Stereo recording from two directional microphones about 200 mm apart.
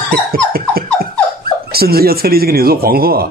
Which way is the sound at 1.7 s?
50° right (ahead or behind).